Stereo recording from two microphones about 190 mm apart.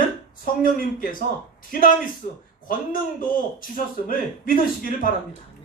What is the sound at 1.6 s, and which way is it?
A man's voice, 45° left (ahead or behind).